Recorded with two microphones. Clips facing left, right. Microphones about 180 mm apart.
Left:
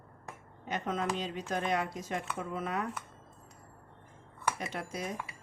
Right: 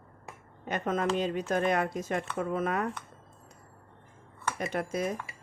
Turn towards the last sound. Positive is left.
turn(degrees=-55)  # may be behind; listen again after turning